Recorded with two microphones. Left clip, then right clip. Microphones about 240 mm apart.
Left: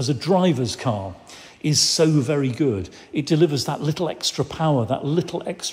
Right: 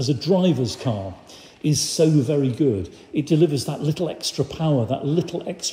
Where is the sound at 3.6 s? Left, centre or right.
Left.